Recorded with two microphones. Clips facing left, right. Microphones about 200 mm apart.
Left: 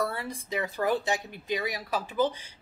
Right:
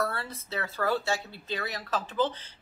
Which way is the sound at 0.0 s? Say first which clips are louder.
Left 1 dB; 15° left (ahead or behind).